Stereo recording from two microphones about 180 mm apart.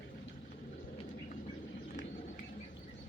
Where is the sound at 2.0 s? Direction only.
45° left (ahead or behind).